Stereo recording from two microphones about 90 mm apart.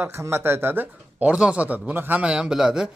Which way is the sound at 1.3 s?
10° right (ahead or behind).